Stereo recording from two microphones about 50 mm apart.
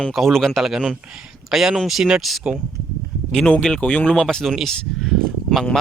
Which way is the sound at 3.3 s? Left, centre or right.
Centre.